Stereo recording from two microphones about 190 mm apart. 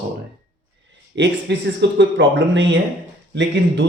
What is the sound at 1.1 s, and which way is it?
A man's voice, 65° right (ahead or behind).